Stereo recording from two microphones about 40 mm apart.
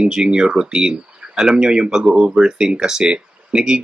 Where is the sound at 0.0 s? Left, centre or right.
Centre.